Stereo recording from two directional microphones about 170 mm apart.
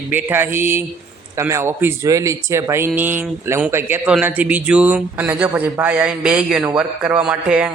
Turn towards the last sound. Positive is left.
turn(degrees=-5)  # may be behind; listen again after turning